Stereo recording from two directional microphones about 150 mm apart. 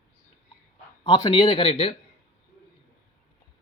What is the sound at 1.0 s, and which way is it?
Speech, 35° left (ahead or behind).